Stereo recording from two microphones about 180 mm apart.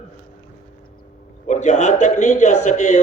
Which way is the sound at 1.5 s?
40° left (ahead or behind).